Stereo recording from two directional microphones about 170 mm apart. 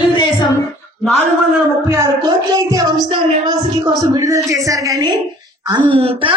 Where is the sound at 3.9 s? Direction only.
20° right (ahead or behind).